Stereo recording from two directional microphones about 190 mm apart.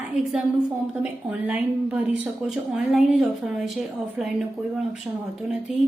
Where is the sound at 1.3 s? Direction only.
5° right (ahead or behind).